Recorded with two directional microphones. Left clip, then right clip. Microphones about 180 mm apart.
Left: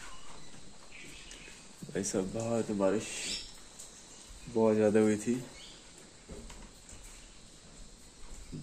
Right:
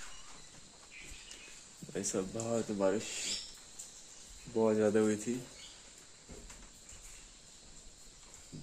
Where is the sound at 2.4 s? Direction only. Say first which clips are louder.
Left 2 dB; 15° right (ahead or behind).